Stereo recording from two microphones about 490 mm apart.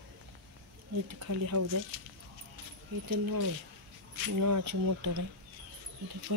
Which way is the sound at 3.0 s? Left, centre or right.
Right.